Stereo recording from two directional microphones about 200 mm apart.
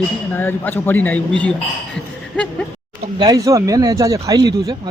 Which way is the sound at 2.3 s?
5° left (ahead or behind).